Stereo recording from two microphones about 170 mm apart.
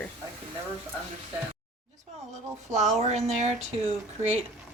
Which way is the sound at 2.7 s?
45° right (ahead or behind).